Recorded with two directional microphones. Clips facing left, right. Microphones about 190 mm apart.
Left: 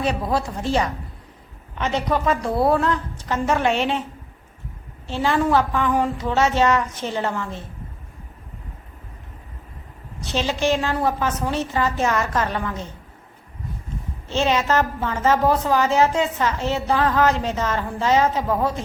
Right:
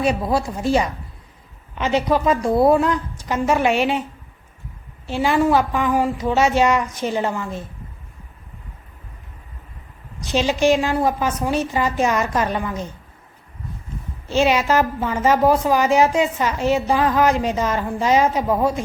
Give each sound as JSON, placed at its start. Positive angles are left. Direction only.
{"t": 0.0, "sound": "a woman's voice", "side_deg": -10}
{"t": 2.2, "sound": "a woman's voice", "side_deg": -15}
{"t": 5.0, "sound": "a woman's voice", "side_deg": -10}
{"t": 10.2, "sound": "a woman's voice", "side_deg": -15}
{"t": 14.3, "sound": "a woman's voice", "side_deg": -10}